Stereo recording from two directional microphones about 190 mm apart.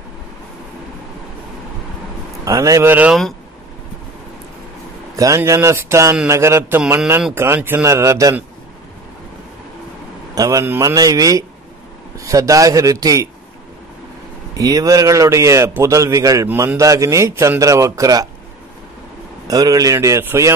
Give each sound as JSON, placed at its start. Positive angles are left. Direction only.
{"t": 2.4, "sound": "a man's voice", "side_deg": -20}
{"t": 5.1, "sound": "a man's voice", "side_deg": -15}
{"t": 10.3, "sound": "a man's voice", "side_deg": -20}
{"t": 14.6, "sound": "a man's voice", "side_deg": -20}
{"t": 19.4, "sound": "a man's voice", "side_deg": -20}